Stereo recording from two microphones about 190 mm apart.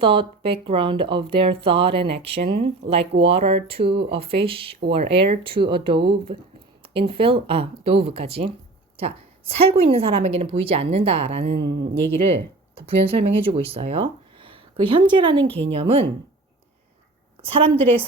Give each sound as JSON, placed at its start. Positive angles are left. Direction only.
{"t": 0.0, "sound": "speech", "side_deg": -25}
{"t": 3.0, "sound": "speech", "side_deg": -65}
{"t": 3.2, "sound": "a woman's voice", "side_deg": -30}
{"t": 17.4, "sound": "speech", "side_deg": -30}